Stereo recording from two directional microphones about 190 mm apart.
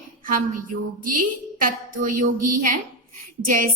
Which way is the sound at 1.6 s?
45° right (ahead or behind).